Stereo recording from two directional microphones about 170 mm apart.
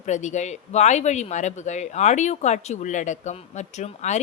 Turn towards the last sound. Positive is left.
turn(degrees=40)  # may be behind; listen again after turning